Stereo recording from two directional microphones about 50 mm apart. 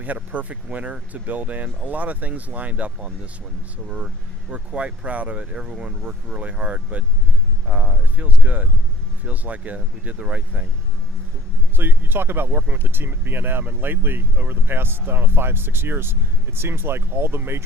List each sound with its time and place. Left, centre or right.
0.0 s speech: right
3.8 s speech: centre
11.8 s speech: right
12.5 s speech: right